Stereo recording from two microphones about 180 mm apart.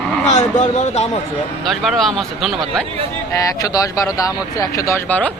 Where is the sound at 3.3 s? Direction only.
20° left (ahead or behind).